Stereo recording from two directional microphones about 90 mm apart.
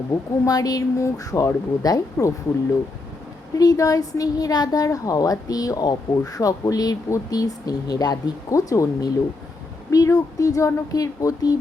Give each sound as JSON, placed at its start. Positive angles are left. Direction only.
{"t": 0.1, "sound": "speech", "side_deg": 45}
{"t": 3.6, "sound": "a woman's voice", "side_deg": 40}